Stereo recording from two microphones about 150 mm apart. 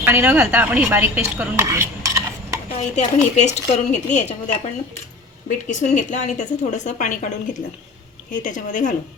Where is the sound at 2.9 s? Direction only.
50° left (ahead or behind).